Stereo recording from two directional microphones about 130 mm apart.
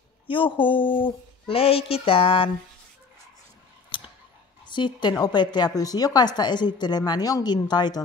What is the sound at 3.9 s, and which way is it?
Scissors, 40° left (ahead or behind).